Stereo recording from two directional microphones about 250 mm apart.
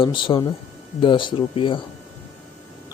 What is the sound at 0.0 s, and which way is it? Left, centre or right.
Speech, centre.